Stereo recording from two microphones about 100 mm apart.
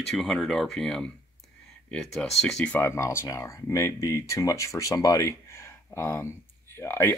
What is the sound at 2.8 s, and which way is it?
Speech, 25° left (ahead or behind).